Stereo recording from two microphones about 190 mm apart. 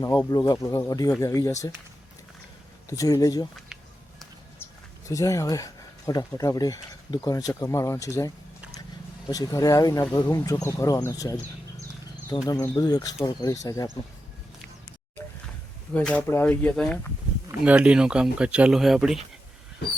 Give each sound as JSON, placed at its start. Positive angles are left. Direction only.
{"t": 0.3, "sound": "speech", "side_deg": 20}
{"t": 2.9, "sound": "speech", "side_deg": 20}
{"t": 4.6, "sound": "speech", "side_deg": 15}
{"t": 9.3, "sound": "speech", "side_deg": 20}
{"t": 12.5, "sound": "speech", "side_deg": 15}
{"t": 16.0, "sound": "speech", "side_deg": 10}
{"t": 17.6, "sound": "speech", "side_deg": -5}